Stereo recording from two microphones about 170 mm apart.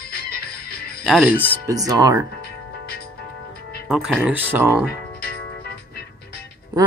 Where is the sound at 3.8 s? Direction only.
5° right (ahead or behind).